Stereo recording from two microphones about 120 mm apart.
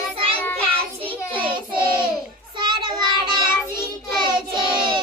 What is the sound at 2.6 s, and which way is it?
Child singing, 40° right (ahead or behind).